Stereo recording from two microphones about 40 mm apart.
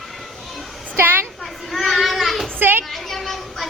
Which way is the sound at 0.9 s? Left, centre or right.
Right.